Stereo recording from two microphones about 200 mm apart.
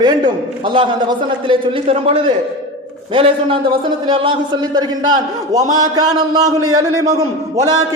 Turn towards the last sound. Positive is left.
turn(degrees=-15)  # may be behind; listen again after turning